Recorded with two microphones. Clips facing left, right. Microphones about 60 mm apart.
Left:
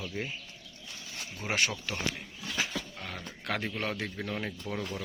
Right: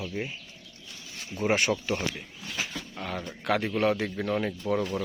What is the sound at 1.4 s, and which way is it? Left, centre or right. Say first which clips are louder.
Speech: right 9 dB; centre.